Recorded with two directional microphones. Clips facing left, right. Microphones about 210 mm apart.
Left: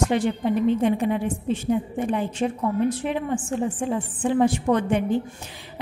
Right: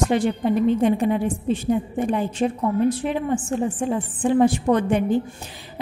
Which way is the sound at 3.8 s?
35° right (ahead or behind).